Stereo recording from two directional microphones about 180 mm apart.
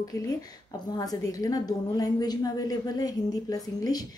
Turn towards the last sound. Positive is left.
turn(degrees=20)  # may be behind; listen again after turning